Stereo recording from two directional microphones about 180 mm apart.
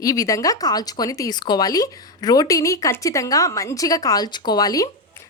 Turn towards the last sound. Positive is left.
turn(degrees=20)  # may be behind; listen again after turning